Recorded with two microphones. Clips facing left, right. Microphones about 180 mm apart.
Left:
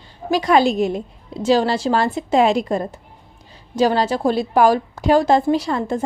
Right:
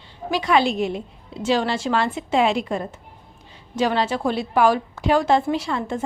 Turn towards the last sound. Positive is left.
turn(degrees=40)  # may be behind; listen again after turning